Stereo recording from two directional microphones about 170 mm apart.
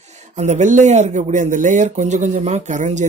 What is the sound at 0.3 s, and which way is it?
Speech, 40° right (ahead or behind).